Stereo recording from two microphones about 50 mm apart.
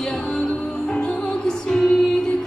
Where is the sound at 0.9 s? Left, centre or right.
Left.